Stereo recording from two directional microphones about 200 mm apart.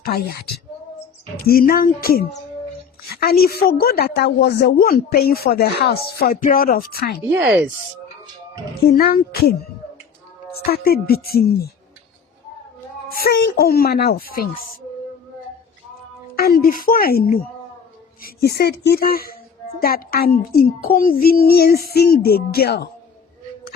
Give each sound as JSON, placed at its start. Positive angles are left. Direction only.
{"t": 0.0, "sound": "a woman's voice", "side_deg": 50}
{"t": 1.5, "sound": "a woman's voice", "side_deg": 45}
{"t": 7.3, "sound": "speech", "side_deg": -5}
{"t": 8.9, "sound": "a woman's voice", "side_deg": 50}
{"t": 10.7, "sound": "a woman's voice", "side_deg": 50}
{"t": 13.1, "sound": "a woman's voice", "side_deg": 50}
{"t": 16.4, "sound": "a woman's voice", "side_deg": 50}